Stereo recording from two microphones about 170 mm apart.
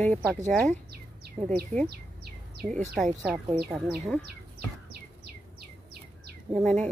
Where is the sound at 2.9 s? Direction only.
5° right (ahead or behind).